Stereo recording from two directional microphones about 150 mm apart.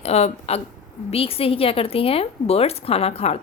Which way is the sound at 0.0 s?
45° left (ahead or behind).